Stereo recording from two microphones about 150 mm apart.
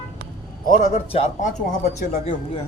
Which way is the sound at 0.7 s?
55° left (ahead or behind).